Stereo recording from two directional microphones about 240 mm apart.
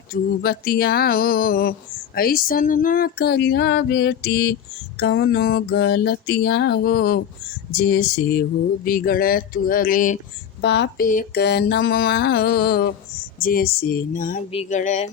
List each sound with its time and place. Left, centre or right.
0.1 s mantra: left
10.6 s mantra: left